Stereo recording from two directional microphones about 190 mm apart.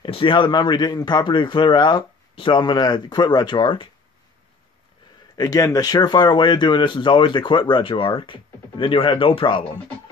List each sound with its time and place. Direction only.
0.0 s speech: 25° left (ahead or behind)
5.4 s speech: 20° left (ahead or behind)